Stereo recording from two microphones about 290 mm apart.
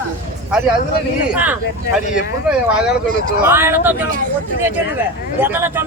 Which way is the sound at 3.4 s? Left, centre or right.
Centre.